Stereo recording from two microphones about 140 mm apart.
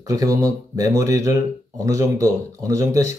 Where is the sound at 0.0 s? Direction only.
25° right (ahead or behind).